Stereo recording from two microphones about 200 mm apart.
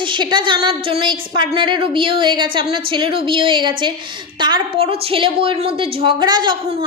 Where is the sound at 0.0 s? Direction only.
25° right (ahead or behind).